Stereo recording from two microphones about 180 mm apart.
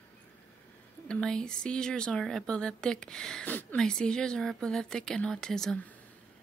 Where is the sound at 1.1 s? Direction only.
5° left (ahead or behind).